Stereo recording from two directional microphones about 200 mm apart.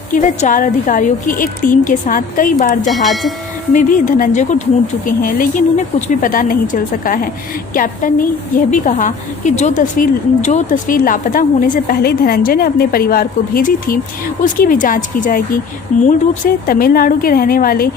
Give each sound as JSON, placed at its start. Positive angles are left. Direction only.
{"t": 0.1, "sound": "a woman's voice", "side_deg": 40}
{"t": 2.8, "sound": "speech", "side_deg": 0}
{"t": 3.7, "sound": "a woman's voice", "side_deg": 40}